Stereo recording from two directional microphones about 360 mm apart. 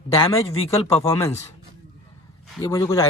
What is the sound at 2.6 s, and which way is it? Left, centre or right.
Speech, centre.